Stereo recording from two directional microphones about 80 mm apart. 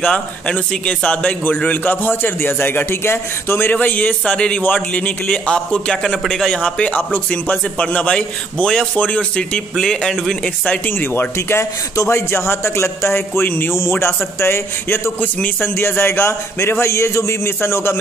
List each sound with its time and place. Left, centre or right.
0.0 s a man's voice: centre
9.8 s speech: centre
10.9 s a man's voice: left